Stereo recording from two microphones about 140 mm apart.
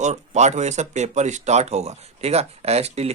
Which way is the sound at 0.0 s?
55° right (ahead or behind).